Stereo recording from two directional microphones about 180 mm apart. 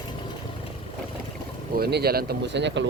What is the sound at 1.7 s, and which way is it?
Speech, 60° right (ahead or behind).